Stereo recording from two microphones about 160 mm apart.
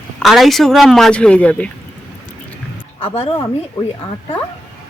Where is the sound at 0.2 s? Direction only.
Centre (ahead or behind).